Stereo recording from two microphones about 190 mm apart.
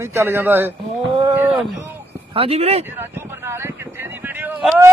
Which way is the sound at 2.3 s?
30° right (ahead or behind).